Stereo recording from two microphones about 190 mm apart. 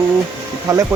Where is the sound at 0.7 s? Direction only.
15° right (ahead or behind).